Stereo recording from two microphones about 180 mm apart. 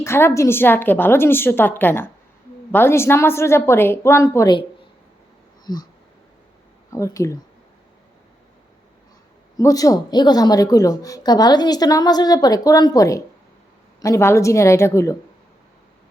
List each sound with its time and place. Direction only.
0.0 s a woman's voice: 15° left (ahead or behind)
5.7 s a woman's voice: 20° left (ahead or behind)
6.9 s a woman's voice: 15° left (ahead or behind)
9.6 s a woman's voice: 20° left (ahead or behind)